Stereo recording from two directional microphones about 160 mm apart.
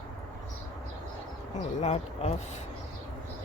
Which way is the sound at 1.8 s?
45° left (ahead or behind).